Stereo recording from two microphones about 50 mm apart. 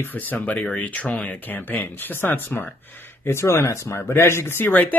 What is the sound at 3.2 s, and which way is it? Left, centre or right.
Speech, left.